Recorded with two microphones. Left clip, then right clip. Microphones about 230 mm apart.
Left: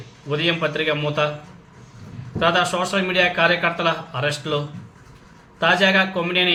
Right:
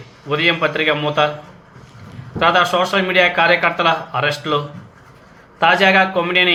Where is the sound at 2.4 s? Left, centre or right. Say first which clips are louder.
Right 5 dB; centre.